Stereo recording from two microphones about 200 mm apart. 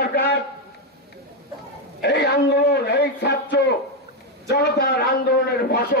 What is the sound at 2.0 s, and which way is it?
A man's voice, 55° left (ahead or behind).